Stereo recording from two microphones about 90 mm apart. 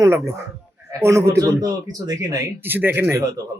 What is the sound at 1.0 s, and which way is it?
Speech, 30° right (ahead or behind).